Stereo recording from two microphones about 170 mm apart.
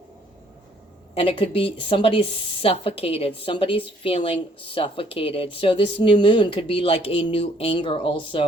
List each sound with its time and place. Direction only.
1.1 s speech: 35° left (ahead or behind)